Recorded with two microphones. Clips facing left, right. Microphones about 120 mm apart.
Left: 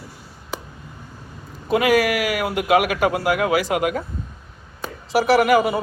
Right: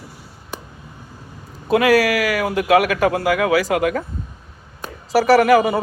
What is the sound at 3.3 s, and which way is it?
Speech, 90° right.